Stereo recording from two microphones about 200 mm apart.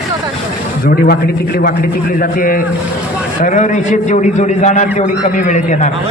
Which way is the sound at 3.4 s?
40° left (ahead or behind).